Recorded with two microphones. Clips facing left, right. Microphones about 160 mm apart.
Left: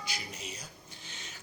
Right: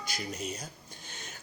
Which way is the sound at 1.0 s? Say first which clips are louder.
Right 3 dB; 45° right (ahead or behind).